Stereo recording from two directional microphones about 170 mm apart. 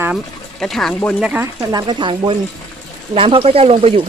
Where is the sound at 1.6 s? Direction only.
20° right (ahead or behind).